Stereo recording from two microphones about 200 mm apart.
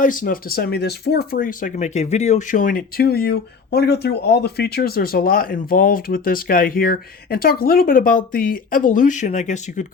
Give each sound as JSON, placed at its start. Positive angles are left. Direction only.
{"t": 0.0, "sound": "speech", "side_deg": 45}